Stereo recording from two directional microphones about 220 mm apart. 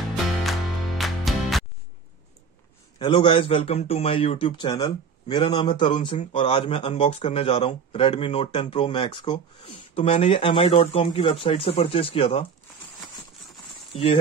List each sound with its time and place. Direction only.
0.4 s music: centre (ahead or behind)
3.0 s a man's voice: 20° left (ahead or behind)